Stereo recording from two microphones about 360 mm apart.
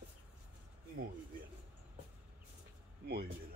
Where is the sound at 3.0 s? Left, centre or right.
Right.